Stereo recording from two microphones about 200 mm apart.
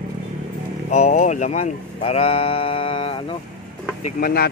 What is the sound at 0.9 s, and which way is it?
Speech, 35° left (ahead or behind).